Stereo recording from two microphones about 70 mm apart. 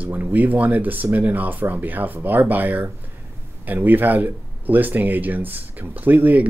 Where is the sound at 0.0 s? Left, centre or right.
Right.